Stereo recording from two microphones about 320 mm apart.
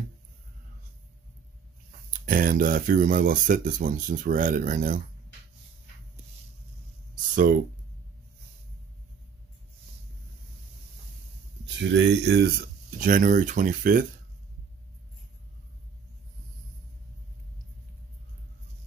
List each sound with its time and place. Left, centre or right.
1.9 s speech: right
11.6 s speech: right